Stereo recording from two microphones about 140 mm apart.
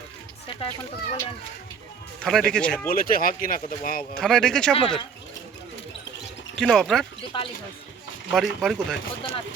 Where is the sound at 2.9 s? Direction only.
90° left.